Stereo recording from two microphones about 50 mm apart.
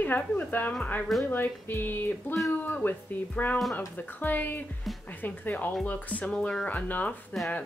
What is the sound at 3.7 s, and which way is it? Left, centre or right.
Speech, left.